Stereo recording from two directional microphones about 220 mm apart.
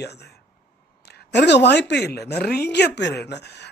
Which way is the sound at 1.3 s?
50° left (ahead or behind).